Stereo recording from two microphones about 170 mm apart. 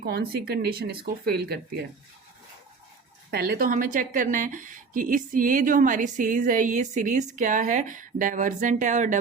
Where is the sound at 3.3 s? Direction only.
65° right (ahead or behind).